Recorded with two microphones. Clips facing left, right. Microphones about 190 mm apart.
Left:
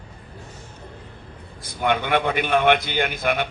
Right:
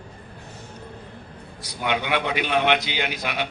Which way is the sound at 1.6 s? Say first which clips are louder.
Left 3 dB; 50° left (ahead or behind).